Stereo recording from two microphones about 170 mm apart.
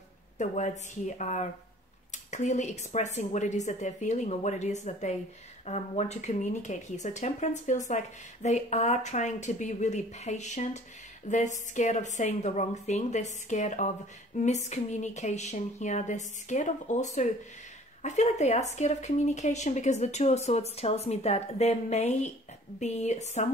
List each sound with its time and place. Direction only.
0.4 s speech: 45° left (ahead or behind)